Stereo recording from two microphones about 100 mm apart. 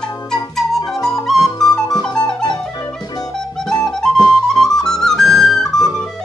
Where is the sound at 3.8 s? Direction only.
5° left (ahead or behind).